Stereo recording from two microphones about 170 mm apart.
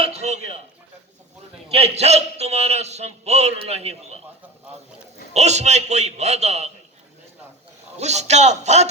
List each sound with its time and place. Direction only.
0.0 s a sound: 40° right (ahead or behind)
1.7 s a man's voice: 40° right (ahead or behind)
5.3 s a man's voice: 40° right (ahead or behind)
7.9 s a man's voice: 40° right (ahead or behind)